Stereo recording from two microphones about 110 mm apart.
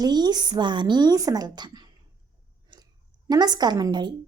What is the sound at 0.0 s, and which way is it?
A woman's voice, 40° right (ahead or behind).